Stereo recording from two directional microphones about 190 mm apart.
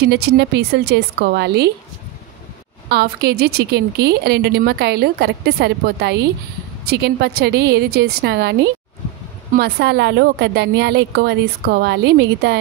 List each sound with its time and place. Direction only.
0.0 s a woman's voice: 60° right (ahead or behind)
2.9 s a woman's voice: 60° right (ahead or behind)